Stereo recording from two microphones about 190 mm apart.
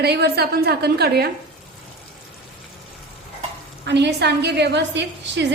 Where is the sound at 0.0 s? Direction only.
60° right (ahead or behind).